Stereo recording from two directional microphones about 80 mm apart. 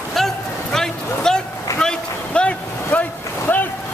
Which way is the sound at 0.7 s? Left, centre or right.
Centre.